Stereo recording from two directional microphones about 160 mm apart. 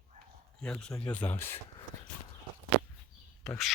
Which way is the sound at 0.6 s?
5° left (ahead or behind).